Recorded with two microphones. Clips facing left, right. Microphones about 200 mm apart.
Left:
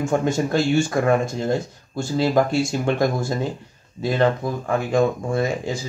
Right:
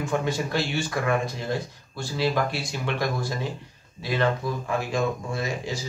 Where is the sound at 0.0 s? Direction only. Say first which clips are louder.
Left 6 dB; 45° left (ahead or behind).